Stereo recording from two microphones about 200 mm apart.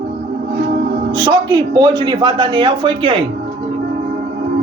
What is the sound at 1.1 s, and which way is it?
A man's voice, 20° right (ahead or behind).